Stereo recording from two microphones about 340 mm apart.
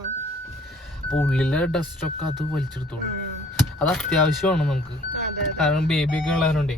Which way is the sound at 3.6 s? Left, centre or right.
Centre.